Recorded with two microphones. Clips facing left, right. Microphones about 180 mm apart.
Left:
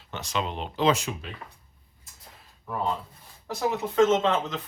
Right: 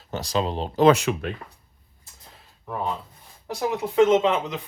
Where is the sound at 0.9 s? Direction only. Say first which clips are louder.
Right 7 dB; 65° right (ahead or behind).